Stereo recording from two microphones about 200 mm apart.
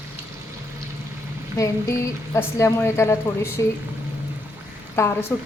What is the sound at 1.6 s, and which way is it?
A woman's voice, 15° left (ahead or behind).